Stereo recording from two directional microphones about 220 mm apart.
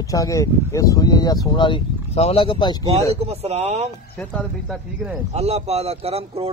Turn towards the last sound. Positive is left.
turn(degrees=-25)  # may be behind; listen again after turning